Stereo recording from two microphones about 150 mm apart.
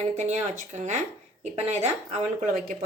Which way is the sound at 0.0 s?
55° right (ahead or behind).